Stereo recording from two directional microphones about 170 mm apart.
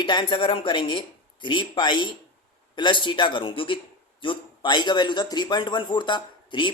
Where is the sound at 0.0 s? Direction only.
25° left (ahead or behind).